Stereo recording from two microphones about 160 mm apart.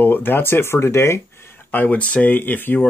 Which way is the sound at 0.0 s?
10° left (ahead or behind).